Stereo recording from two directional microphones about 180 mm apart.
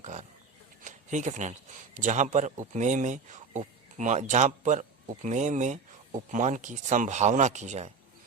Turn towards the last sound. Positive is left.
turn(degrees=-40)  # may be behind; listen again after turning